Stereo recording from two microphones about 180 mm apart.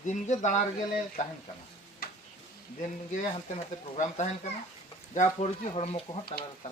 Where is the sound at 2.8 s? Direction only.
45° left (ahead or behind).